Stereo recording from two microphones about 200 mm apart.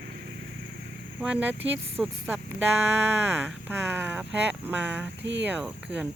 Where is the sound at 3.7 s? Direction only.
10° right (ahead or behind).